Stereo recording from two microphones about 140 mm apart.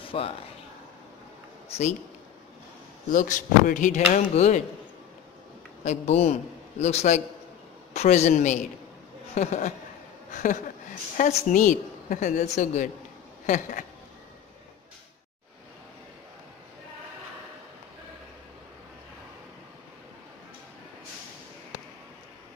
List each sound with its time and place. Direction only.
0.0 s a sound: 40° left (ahead or behind)
1.7 s a man's voice: 50° left (ahead or behind)
3.1 s speech: 75° left (ahead or behind); by 4.6 s 55° left (ahead or behind)
5.9 s a man's voice: 50° left (ahead or behind)
13.5 s speech: 70° left (ahead or behind)